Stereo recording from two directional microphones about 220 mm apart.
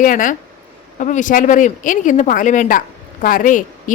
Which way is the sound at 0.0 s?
35° left (ahead or behind).